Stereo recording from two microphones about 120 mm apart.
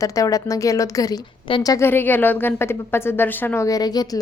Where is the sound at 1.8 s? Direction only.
15° left (ahead or behind).